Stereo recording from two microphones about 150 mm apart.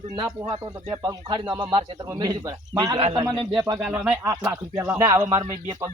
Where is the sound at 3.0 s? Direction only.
45° right (ahead or behind).